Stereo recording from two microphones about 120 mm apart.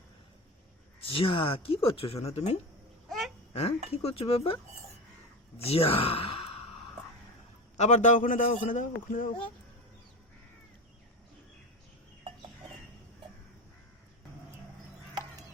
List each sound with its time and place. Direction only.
1.0 s speech: 50° left (ahead or behind)
3.1 s babbling: centre (ahead or behind)
3.5 s speech: 55° left (ahead or behind)
5.6 s speech: 55° left (ahead or behind)
7.8 s a man's voice: 85° left